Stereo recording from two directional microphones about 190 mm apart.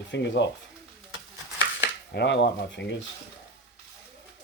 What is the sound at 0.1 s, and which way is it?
Speech, 70° left (ahead or behind).